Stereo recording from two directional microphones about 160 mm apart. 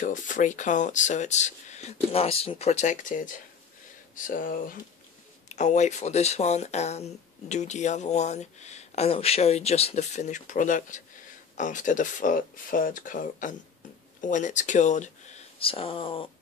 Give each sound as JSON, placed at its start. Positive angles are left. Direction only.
{"t": 0.0, "sound": "speech", "side_deg": 55}
{"t": 5.5, "sound": "speech", "side_deg": 50}
{"t": 15.6, "sound": "speech", "side_deg": 35}